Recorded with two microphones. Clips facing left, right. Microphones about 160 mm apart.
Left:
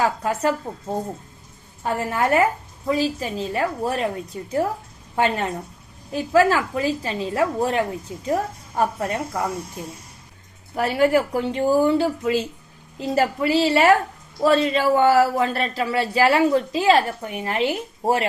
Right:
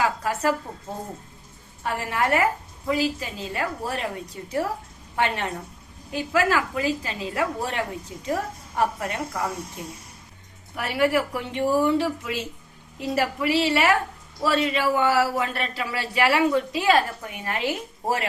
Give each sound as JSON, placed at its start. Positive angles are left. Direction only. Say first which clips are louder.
{"t": 0.2, "sound": "a woman's voice", "louder": "left 2 dB", "side_deg": 25}
{"t": 1.8, "sound": "a woman's voice", "louder": "left 3 dB", "side_deg": 25}
{"t": 10.8, "sound": "a man's voice", "louder": "left 4 dB", "side_deg": 35}